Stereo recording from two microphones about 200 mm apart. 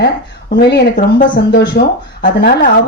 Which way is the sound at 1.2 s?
50° left (ahead or behind).